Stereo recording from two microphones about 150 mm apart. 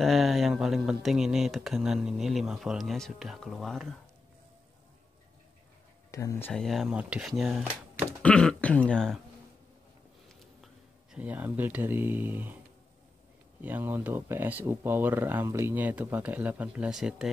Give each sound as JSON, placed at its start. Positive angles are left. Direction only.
{"t": 0.0, "sound": "speech", "side_deg": 0}
{"t": 6.1, "sound": "speech", "side_deg": 20}
{"t": 6.5, "sound": "speech", "side_deg": 0}
{"t": 10.6, "sound": "speech", "side_deg": -5}
{"t": 13.6, "sound": "speech", "side_deg": -10}